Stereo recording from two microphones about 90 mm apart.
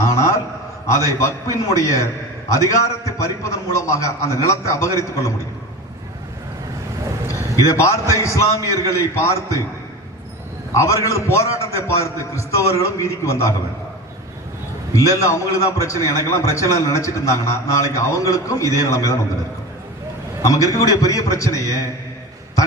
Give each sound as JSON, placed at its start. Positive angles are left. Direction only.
{"t": 0.0, "sound": "a sound", "side_deg": 35}
{"t": 0.9, "sound": "a man's voice", "side_deg": 35}
{"t": 7.3, "sound": "a sound", "side_deg": 35}
{"t": 8.1, "sound": "a man's voice", "side_deg": 35}
{"t": 10.8, "sound": "a man's voice", "side_deg": 35}
{"t": 14.9, "sound": "a man's voice", "side_deg": 35}
{"t": 20.4, "sound": "a man's voice", "side_deg": 40}